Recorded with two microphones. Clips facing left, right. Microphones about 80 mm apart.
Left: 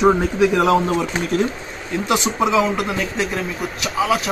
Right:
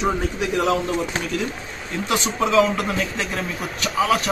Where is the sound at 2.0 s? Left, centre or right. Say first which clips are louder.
Left 3 dB; centre.